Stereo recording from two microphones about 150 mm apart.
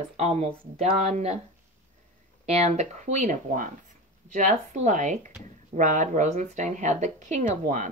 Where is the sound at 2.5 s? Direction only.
45° right (ahead or behind).